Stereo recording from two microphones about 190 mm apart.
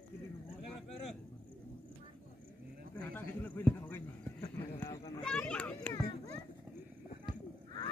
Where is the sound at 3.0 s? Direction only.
10° left (ahead or behind).